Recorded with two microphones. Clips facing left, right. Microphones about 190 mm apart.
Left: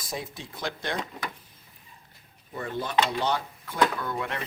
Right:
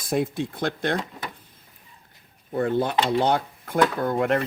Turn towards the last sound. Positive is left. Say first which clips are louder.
# right 10 dB
turn(degrees=-50)  # may be behind; listen again after turning